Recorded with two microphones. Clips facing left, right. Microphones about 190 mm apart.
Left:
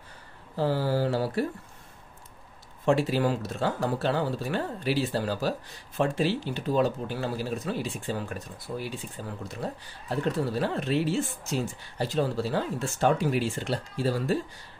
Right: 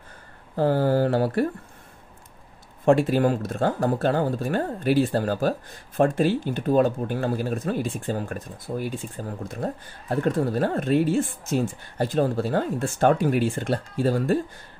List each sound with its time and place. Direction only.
0.6 s speech: 50° right (ahead or behind)
2.8 s speech: 50° right (ahead or behind)